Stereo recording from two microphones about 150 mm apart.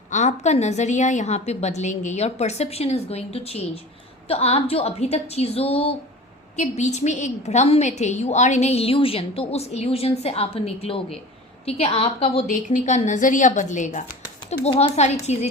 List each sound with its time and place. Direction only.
0.1 s a woman's voice: 50° left (ahead or behind)
12.5 s a woman's voice: 55° left (ahead or behind)